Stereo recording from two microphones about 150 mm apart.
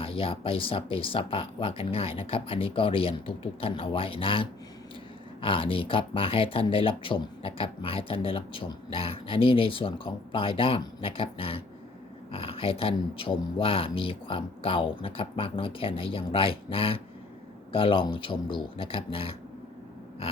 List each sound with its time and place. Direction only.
0.0 s speech: 40° left (ahead or behind)